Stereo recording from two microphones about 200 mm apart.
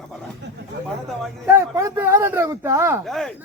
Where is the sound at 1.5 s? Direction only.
15° right (ahead or behind).